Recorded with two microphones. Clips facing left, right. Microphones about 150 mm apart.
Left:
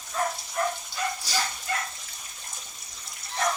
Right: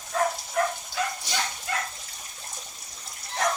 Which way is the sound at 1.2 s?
20° right (ahead or behind).